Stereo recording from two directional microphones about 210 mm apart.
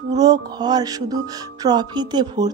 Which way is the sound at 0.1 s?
20° right (ahead or behind).